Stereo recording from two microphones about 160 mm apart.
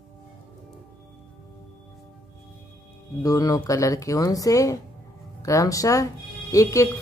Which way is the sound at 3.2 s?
20° left (ahead or behind).